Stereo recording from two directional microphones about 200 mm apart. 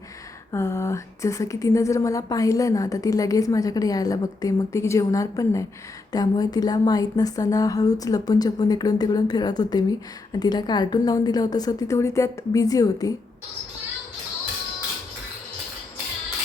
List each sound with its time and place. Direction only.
0.5 s a woman's voice: 15° left (ahead or behind)